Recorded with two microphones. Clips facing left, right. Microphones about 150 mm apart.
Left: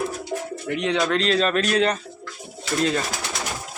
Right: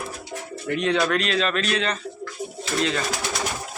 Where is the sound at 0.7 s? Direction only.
20° left (ahead or behind); by 2.0 s 40° left (ahead or behind).